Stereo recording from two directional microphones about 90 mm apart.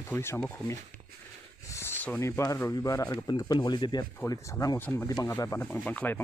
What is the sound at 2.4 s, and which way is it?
Speech, 40° left (ahead or behind).